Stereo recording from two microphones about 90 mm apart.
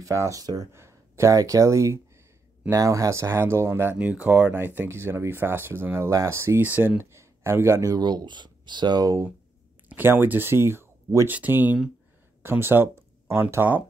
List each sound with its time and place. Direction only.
0.0 s speech: 35° right (ahead or behind)
4.0 s speech: 15° right (ahead or behind); by 9.0 s 55° right (ahead or behind)
9.8 s speech: 25° right (ahead or behind)